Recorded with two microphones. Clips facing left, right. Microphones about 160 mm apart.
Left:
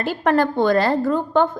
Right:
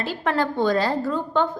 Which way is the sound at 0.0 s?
50° left (ahead or behind).